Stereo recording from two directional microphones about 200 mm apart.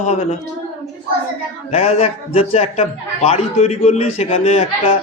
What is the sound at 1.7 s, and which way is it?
A man's voice, 30° left (ahead or behind).